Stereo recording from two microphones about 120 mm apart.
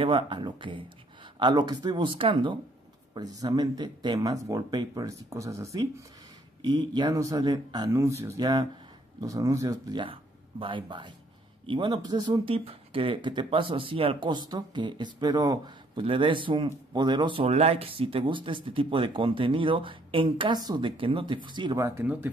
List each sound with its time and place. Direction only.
0.0 s speech: 45° right (ahead or behind)
3.2 s speech: 35° right (ahead or behind)
7.9 s speech: 25° right (ahead or behind)
10.6 s speech: 45° right (ahead or behind)
12.5 s speech: 50° right (ahead or behind); by 20.9 s 35° right (ahead or behind)
20.9 s speech: 45° right (ahead or behind)
21.7 s speech: 25° right (ahead or behind)
22.0 s speech: 10° right (ahead or behind)